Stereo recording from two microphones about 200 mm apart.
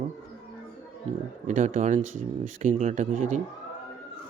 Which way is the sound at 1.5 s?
35° right (ahead or behind).